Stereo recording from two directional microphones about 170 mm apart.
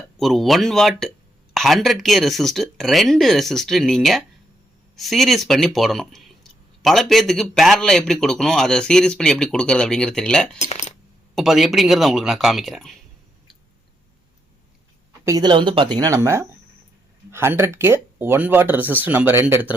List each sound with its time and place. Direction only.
0.2 s speech: centre (ahead or behind)
10.7 s coin: 40° left (ahead or behind)
11.3 s speech: centre (ahead or behind)
15.2 s speech: 20° right (ahead or behind)